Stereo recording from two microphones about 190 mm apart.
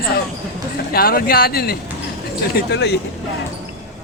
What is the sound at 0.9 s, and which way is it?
Speech, 50° left (ahead or behind).